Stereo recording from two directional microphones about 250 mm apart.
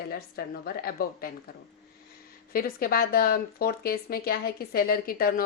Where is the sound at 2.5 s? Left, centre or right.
Left.